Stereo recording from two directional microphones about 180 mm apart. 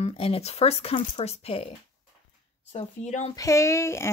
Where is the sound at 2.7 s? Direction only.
40° left (ahead or behind).